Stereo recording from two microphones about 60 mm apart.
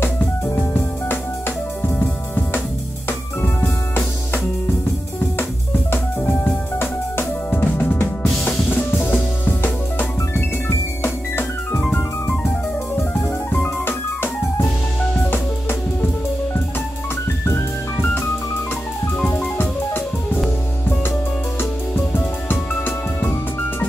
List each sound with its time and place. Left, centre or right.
0.0 s music: left
3.6 s music: left
5.9 s music: left
13.8 s keyboard: left
19.3 s music: left
21.9 s music: left